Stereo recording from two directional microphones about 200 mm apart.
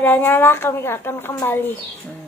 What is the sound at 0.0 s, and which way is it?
A woman's voice, 10° left (ahead or behind).